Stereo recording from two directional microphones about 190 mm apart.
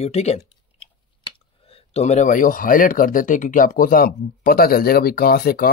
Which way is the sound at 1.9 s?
40° left (ahead or behind).